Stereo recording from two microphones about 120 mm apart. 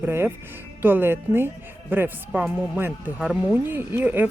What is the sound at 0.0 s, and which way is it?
Speech, 15° right (ahead or behind).